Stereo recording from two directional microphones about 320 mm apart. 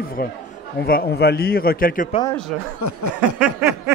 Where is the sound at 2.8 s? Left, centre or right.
Left.